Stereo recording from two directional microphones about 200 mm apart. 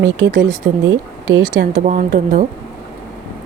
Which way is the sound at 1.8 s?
40° right (ahead or behind).